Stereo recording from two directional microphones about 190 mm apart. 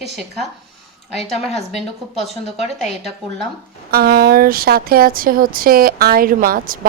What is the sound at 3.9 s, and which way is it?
Speech, 50° right (ahead or behind).